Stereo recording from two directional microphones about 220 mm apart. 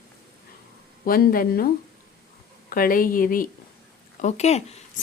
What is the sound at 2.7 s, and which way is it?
Speech, 40° left (ahead or behind).